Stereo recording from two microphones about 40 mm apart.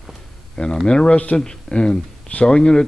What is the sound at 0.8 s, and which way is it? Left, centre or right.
Speech, left.